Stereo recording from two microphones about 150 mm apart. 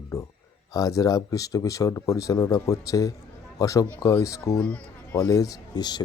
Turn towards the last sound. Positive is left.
turn(degrees=25)  # may be behind; listen again after turning